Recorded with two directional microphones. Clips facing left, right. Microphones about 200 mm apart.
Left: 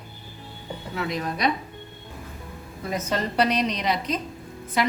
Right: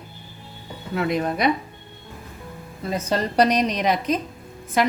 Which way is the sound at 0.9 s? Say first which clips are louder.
Right 6 dB; 55° right (ahead or behind).